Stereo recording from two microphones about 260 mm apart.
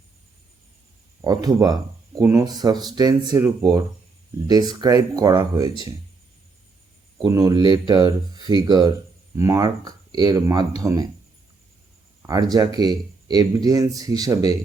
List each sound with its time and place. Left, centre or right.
1.2 s speech: centre
7.3 s speech: centre
12.2 s speech: centre